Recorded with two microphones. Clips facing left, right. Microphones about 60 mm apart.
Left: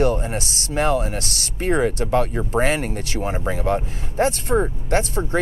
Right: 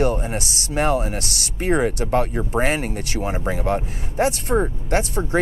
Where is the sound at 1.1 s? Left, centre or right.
Left.